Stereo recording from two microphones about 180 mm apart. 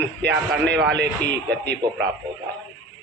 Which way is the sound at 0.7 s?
70° right (ahead or behind).